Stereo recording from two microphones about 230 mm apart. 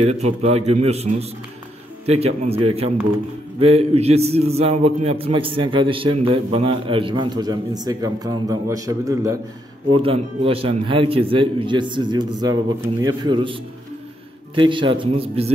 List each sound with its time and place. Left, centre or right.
0.0 s a man's voice: right